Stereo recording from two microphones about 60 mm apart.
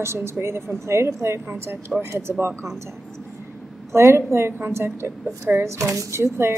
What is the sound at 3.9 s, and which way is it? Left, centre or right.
A woman's voice, right.